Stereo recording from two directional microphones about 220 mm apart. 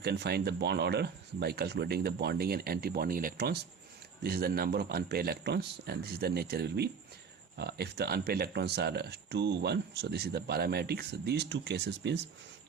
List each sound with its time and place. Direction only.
0.0 s speech: 50° right (ahead or behind)